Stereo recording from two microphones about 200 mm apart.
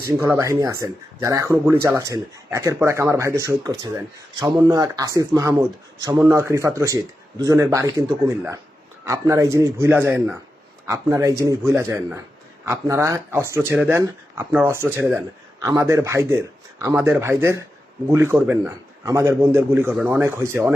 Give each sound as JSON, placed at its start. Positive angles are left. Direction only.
{"t": 0.0, "sound": "speech", "side_deg": -15}
{"t": 9.0, "sound": "speech", "side_deg": -15}